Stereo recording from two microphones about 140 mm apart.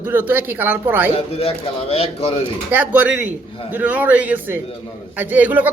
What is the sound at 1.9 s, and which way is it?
Speech, 45° left (ahead or behind).